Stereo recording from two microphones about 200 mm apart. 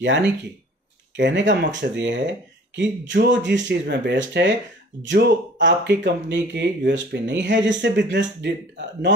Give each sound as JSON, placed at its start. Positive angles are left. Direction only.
{"t": 0.0, "sound": "speech", "side_deg": -65}